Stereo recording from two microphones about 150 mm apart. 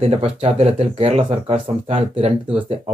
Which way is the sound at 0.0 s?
40° right (ahead or behind).